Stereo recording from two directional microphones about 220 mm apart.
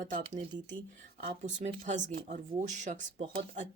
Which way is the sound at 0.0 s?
35° right (ahead or behind).